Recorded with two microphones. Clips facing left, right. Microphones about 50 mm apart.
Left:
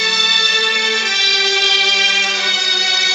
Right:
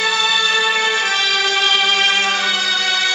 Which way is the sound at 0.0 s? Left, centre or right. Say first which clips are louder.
Even; centre.